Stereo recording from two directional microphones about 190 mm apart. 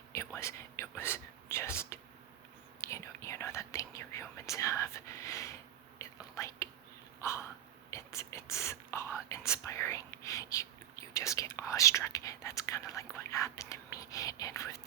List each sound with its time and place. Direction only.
0.3 s whispering: 15° left (ahead or behind)
7.2 s a sound: 15° left (ahead or behind)
7.9 s whispering: 15° left (ahead or behind)